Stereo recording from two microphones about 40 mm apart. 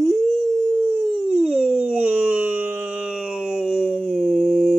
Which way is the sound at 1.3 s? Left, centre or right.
Centre.